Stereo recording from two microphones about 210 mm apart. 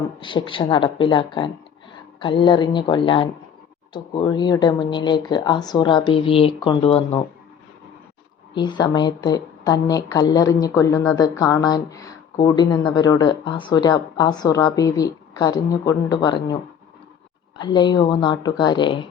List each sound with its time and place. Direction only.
0.2 s a woman's voice: 25° left (ahead or behind)
8.5 s a woman's voice: 20° left (ahead or behind)
17.6 s a woman's voice: 20° left (ahead or behind)